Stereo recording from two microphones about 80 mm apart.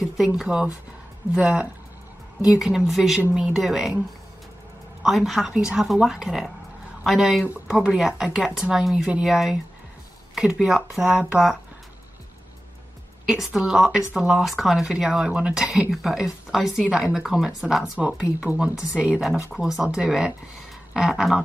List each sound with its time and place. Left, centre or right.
0.4 s speech: centre
5.0 s speech: centre
10.7 s speech: centre
13.3 s speech: centre
17.9 s speech: centre